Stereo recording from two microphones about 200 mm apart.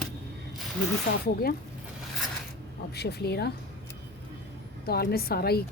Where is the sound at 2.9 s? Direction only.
55° left (ahead or behind).